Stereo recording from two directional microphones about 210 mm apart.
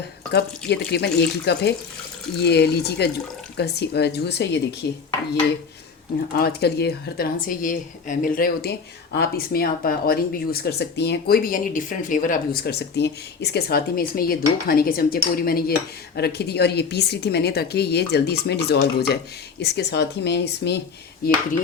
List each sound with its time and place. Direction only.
0.3 s speech: 50° left (ahead or behind)
6.3 s speech: 50° left (ahead or behind)